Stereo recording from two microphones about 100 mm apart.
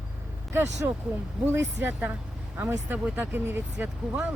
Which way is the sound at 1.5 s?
20° right (ahead or behind).